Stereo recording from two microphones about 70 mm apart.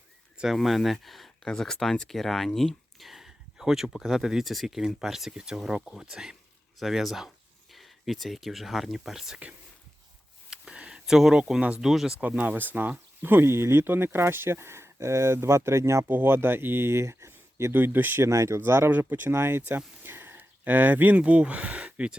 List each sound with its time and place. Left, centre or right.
0.5 s speech: centre
10.5 s a sound: centre
11.8 s speech: centre
12.2 s speech: right
16.0 s speech: right
17.7 s speech: right
18.3 s speech: right
18.9 s speech: right
19.3 s speech: right; by 22.1 s centre